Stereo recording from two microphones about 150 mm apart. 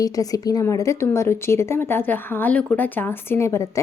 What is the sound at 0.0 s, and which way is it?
A woman's voice, 25° left (ahead or behind).